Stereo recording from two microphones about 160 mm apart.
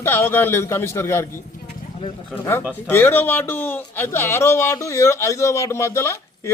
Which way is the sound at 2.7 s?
15° left (ahead or behind).